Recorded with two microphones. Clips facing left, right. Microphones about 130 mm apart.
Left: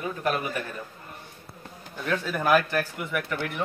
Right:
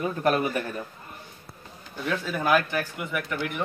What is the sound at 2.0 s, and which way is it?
Speech, centre (ahead or behind).